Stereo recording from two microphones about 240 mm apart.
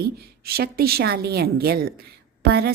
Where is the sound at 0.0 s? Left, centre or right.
Right.